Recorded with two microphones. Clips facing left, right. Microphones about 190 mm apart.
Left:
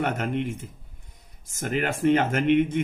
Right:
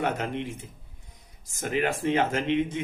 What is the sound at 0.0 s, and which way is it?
Speech, 55° left (ahead or behind).